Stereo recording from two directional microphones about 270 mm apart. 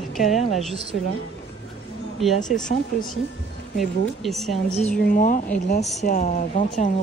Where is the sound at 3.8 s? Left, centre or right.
Centre.